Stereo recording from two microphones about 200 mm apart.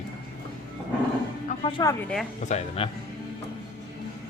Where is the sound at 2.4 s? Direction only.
35° left (ahead or behind).